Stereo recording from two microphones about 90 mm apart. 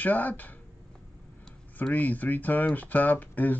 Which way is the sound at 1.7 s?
20° left (ahead or behind).